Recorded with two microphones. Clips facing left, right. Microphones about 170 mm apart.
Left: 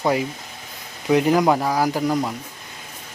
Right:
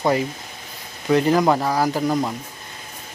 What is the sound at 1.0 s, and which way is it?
Speech, 10° left (ahead or behind).